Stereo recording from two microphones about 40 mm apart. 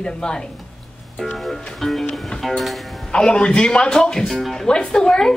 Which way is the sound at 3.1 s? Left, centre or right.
Left.